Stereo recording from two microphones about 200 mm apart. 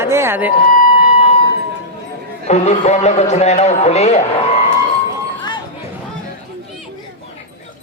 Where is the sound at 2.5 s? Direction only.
35° left (ahead or behind).